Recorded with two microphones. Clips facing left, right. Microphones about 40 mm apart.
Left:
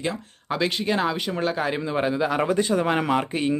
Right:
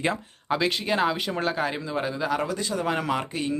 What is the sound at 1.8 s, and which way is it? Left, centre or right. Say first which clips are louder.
Speech: left 5 dB; left.